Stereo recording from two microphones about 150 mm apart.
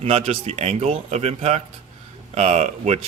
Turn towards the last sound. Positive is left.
turn(degrees=-45)  # may be behind; listen again after turning